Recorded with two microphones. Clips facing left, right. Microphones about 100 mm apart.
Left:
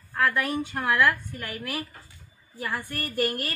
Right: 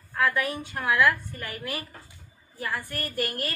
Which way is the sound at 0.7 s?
Centre (ahead or behind).